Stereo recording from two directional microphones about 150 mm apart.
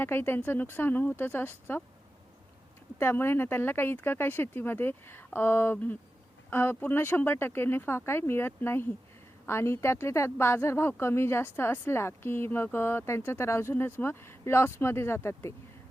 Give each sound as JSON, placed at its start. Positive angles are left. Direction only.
{"t": 0.0, "sound": "speech", "side_deg": 15}
{"t": 3.0, "sound": "speech", "side_deg": 15}